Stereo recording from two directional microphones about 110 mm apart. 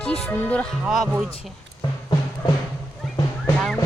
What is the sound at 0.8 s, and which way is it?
Speech, 5° right (ahead or behind).